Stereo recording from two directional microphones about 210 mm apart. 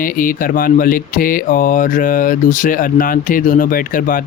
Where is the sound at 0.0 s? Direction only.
40° left (ahead or behind).